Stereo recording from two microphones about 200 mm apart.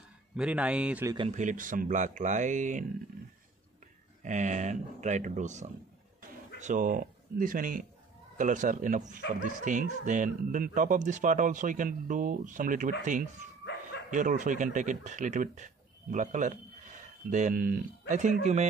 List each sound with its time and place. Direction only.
0.4 s speech: 5° right (ahead or behind)
1.1 s speech: 30° right (ahead or behind)
4.2 s speech: 35° right (ahead or behind)